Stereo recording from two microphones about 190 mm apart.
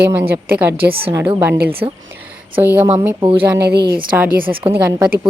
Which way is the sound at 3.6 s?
60° right (ahead or behind).